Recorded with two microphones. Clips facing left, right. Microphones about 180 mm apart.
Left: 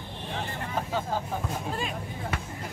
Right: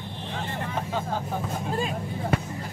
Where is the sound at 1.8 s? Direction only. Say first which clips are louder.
Right 5 dB; 40° right (ahead or behind).